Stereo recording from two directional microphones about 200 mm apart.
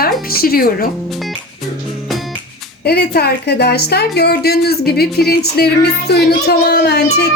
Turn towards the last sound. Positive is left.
turn(degrees=55)  # may be behind; listen again after turning